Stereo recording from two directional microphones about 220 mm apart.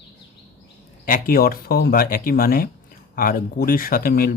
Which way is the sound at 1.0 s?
40° left (ahead or behind).